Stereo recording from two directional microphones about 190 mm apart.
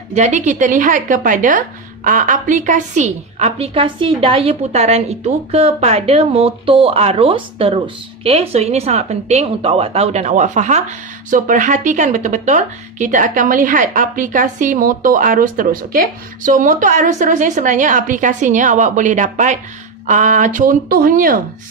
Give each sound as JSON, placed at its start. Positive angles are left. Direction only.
{"t": 0.1, "sound": "a woman's voice", "side_deg": -40}